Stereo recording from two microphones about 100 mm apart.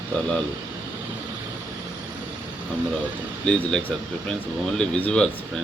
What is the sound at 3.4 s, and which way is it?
Speech, 10° left (ahead or behind).